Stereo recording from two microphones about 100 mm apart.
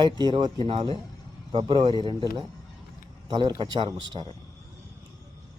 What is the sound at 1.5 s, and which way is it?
Speech, 50° right (ahead or behind).